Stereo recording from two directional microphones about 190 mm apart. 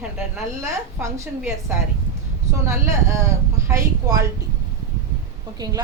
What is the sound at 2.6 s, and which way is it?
Speech, 15° right (ahead or behind).